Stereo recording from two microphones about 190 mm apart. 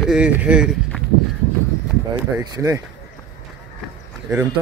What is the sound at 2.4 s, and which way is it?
Speech, 15° right (ahead or behind).